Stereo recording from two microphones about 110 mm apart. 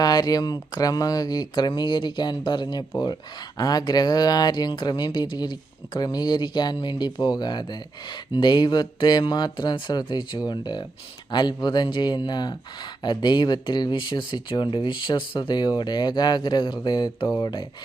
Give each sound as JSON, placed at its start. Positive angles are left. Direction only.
{"t": 0.0, "sound": "speech", "side_deg": 35}